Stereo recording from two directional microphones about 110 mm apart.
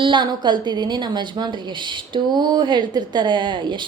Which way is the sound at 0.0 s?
45° right (ahead or behind).